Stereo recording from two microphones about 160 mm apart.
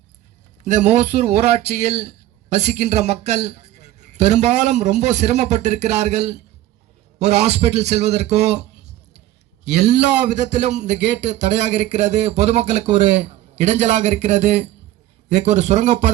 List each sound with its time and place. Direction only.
0.6 s a man's voice: 45° right (ahead or behind)
8.8 s a sound: 90° right
10.5 s a man's voice: 45° right (ahead or behind)